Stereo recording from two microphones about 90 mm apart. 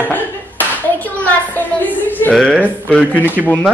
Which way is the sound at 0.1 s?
20° left (ahead or behind).